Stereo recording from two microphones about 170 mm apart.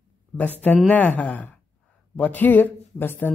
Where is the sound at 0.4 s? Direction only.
10° left (ahead or behind).